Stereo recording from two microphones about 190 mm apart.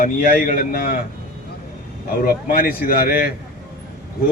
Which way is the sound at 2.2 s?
50° left (ahead or behind).